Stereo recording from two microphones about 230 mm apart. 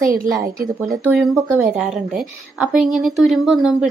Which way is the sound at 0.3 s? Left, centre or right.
Centre.